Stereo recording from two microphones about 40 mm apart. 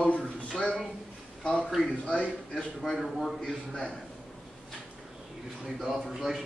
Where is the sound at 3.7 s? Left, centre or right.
Left.